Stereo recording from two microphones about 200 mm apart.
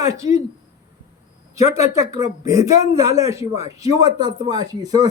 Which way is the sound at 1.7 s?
15° right (ahead or behind).